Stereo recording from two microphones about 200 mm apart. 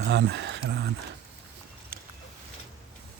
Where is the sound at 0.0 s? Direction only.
55° right (ahead or behind).